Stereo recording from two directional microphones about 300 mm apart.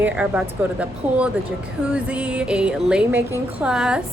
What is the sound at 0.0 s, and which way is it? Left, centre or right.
A woman's voice, centre.